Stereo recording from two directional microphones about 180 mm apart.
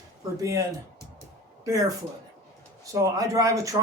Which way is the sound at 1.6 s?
20° right (ahead or behind).